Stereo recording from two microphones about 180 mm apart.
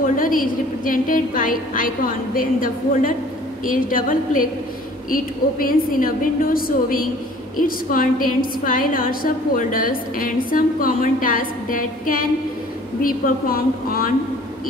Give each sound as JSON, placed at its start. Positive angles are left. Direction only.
{"t": 0.0, "sound": "a woman's voice", "side_deg": 50}